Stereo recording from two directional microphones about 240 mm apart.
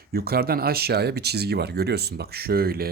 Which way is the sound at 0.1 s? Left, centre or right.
Right.